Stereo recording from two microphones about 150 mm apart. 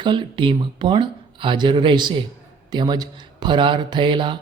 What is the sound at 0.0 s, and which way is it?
Speech, 30° right (ahead or behind).